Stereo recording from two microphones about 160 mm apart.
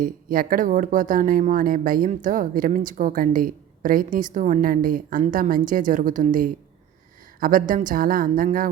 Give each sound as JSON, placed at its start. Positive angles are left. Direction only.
{"t": 0.0, "sound": "speech", "side_deg": -60}